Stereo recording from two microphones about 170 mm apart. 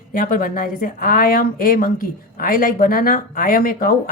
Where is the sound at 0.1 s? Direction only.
55° left (ahead or behind).